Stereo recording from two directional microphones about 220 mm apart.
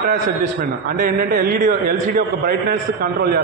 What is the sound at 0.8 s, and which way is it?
A man's voice, 40° right (ahead or behind).